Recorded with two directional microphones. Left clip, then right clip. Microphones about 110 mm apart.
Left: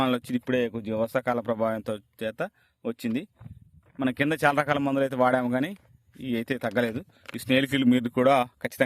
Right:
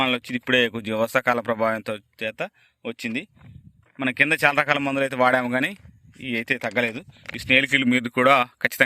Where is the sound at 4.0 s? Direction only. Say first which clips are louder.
Right 5 dB; 45° left (ahead or behind); by 6.2 s 25° left (ahead or behind).